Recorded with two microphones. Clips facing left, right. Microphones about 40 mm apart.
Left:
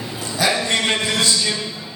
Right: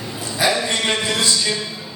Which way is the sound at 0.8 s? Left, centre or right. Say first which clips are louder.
Left 1 dB; centre.